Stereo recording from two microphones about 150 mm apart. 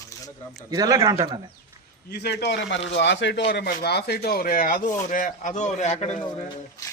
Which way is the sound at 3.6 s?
90° left.